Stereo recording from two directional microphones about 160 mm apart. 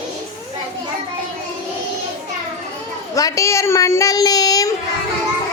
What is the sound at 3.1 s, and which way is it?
A woman's voice, 20° left (ahead or behind).